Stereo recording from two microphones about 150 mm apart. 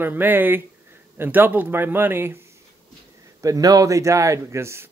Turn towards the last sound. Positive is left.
turn(degrees=-15)  # may be behind; listen again after turning